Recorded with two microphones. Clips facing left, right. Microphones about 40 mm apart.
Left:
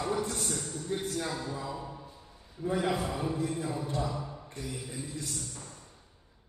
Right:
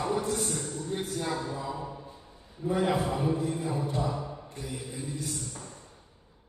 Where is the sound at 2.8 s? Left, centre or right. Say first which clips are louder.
Right 4 dB; centre.